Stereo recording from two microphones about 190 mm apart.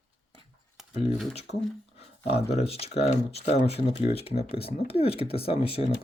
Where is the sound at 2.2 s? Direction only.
30° left (ahead or behind).